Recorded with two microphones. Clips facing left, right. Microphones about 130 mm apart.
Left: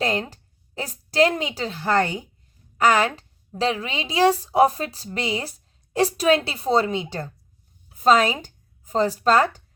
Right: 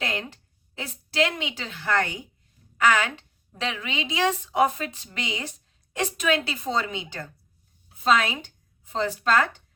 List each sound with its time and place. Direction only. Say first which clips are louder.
0.0 s a woman's voice: left 7 dB; 35° left (ahead or behind)